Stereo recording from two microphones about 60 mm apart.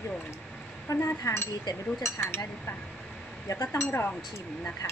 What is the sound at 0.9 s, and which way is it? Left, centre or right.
Speech, left.